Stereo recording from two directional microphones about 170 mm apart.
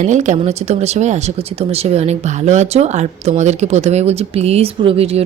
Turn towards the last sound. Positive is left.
turn(degrees=-35)  # may be behind; listen again after turning